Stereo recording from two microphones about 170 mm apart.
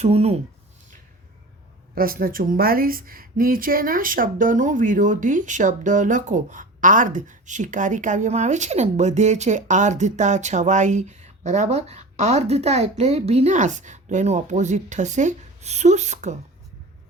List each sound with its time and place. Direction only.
0.0 s speech: 35° right (ahead or behind)
2.0 s a woman's voice: 60° right (ahead or behind)